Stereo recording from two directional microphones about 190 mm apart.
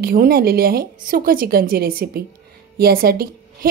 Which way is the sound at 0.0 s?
55° right (ahead or behind).